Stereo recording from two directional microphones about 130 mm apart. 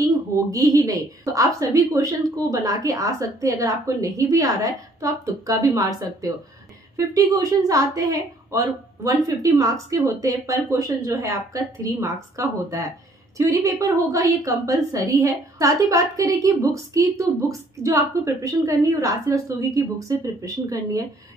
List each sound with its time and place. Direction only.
0.0 s a woman's voice: 25° right (ahead or behind)